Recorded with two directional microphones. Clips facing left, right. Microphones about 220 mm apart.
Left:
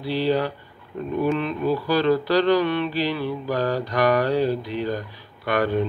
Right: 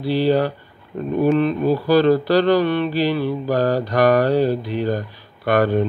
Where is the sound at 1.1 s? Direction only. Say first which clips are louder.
Right 6 dB; 45° right (ahead or behind).